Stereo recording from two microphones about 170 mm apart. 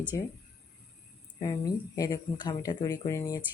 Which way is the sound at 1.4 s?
20° left (ahead or behind).